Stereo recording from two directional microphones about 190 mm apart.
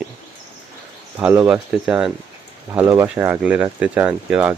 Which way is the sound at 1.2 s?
5° right (ahead or behind).